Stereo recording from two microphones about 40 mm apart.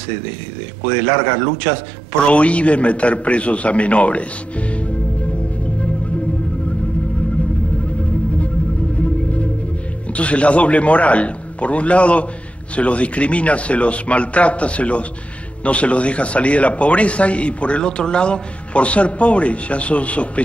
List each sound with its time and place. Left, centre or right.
0.8 s a man's voice: left
2.2 s a man's voice: left
8.9 s music: left
10.1 s a man's voice: left